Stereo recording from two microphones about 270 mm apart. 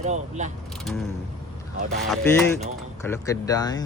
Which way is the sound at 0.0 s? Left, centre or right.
Right.